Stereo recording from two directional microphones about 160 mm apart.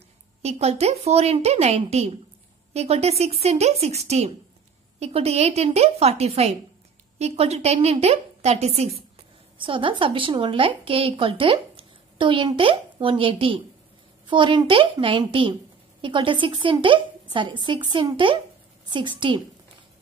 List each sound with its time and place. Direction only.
0.4 s a woman's voice: 40° right (ahead or behind)